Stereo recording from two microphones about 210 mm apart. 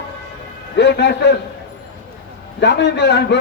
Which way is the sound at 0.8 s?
55° left (ahead or behind).